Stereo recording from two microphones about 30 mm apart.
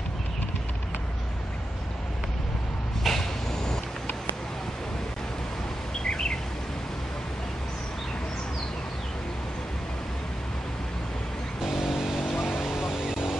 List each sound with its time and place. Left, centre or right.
3.0 s vehicle: centre
6.0 s bird: left
11.6 s vehicle: centre